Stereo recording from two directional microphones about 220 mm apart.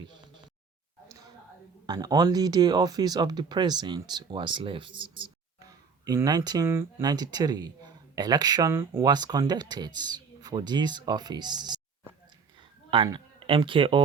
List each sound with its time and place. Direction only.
0.1 s a sound: 20° right (ahead or behind)
1.9 s speech: 15° right (ahead or behind)
12.9 s speech: 20° right (ahead or behind)